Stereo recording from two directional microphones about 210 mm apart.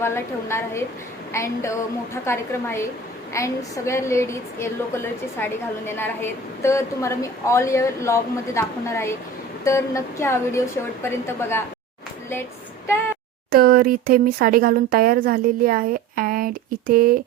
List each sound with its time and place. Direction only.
0.0 s a woman's voice: 10° left (ahead or behind)
13.5 s speech: 45° right (ahead or behind)